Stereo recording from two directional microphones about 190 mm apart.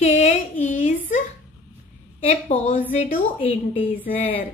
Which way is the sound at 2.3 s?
30° left (ahead or behind).